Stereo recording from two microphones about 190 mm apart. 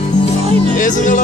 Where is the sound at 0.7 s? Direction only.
45° left (ahead or behind).